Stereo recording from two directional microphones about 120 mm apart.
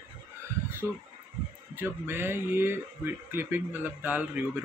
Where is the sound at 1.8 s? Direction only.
20° right (ahead or behind).